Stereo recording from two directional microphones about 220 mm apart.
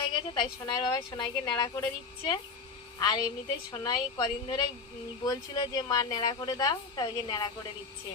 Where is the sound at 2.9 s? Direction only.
20° left (ahead or behind).